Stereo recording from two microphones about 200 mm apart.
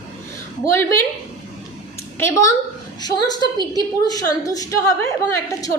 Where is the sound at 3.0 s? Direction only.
20° left (ahead or behind).